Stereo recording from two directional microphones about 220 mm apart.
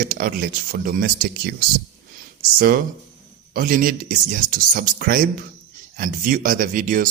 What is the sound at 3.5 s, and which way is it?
Speech, 40° right (ahead or behind).